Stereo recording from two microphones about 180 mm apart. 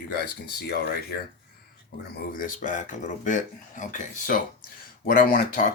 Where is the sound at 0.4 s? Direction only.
60° left (ahead or behind).